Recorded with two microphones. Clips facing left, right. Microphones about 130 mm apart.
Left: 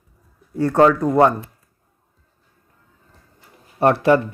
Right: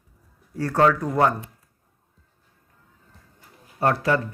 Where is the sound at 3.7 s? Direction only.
25° left (ahead or behind).